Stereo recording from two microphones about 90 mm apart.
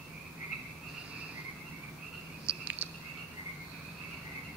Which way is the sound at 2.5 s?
15° right (ahead or behind).